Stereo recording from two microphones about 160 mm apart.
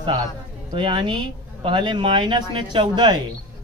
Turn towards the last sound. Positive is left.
turn(degrees=-30)  # may be behind; listen again after turning